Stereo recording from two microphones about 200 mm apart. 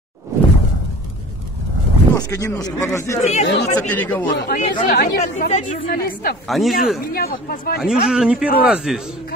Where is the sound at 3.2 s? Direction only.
35° left (ahead or behind).